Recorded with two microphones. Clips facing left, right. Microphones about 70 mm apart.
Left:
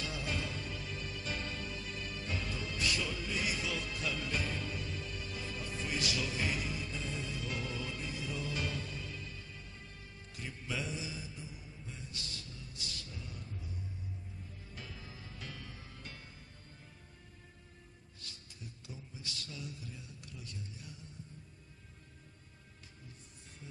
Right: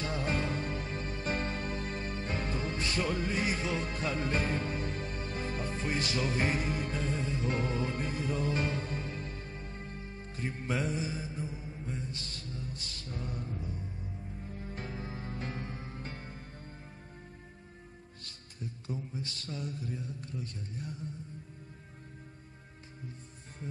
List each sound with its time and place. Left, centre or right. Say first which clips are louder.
0.0 s music: right 6 dB; right
18.2 s music: right 7 dB; right
23.6 s music: right 10 dB; right